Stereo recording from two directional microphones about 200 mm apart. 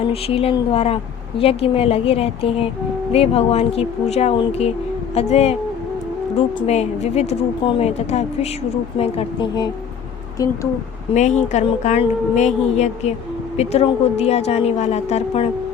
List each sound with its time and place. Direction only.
0.1 s a woman's voice: 30° left (ahead or behind)
6.6 s a woman's voice: 30° left (ahead or behind); by 10.7 s 15° left (ahead or behind)
11.1 s a woman's voice: 35° left (ahead or behind)